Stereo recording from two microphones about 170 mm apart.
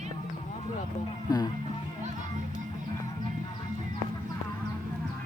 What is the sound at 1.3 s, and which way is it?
Music, 25° left (ahead or behind).